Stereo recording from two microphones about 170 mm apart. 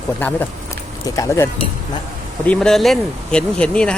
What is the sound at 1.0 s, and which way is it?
Speech, 20° left (ahead or behind).